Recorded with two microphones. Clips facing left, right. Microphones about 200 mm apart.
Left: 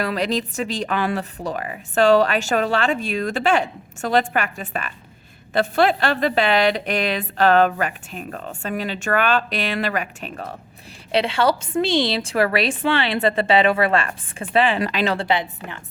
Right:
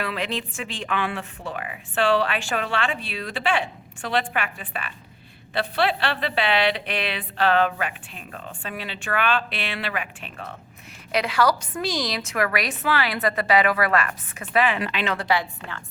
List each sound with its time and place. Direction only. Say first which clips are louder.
0.0 s a woman's voice: left 6 dB; 40° left (ahead or behind)
11.1 s a woman's voice: left 3 dB; 25° left (ahead or behind)